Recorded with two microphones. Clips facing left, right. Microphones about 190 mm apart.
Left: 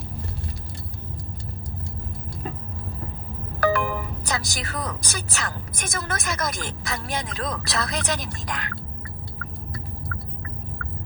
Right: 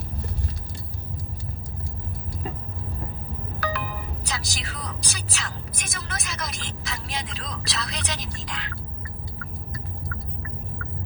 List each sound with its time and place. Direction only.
3.6 s speech: 50° left (ahead or behind)